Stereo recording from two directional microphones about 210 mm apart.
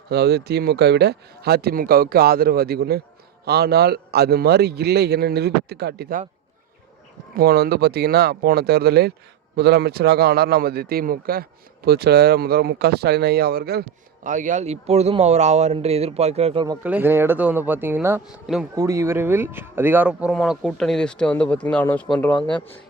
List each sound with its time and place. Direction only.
0.1 s a man's voice: 50° right (ahead or behind)
7.3 s a man's voice: 45° right (ahead or behind)
14.3 s speech: 35° right (ahead or behind)
16.8 s speech: 10° right (ahead or behind)
18.7 s speech: 15° right (ahead or behind); by 22.4 s 5° left (ahead or behind)
22.4 s a man's voice: 25° left (ahead or behind)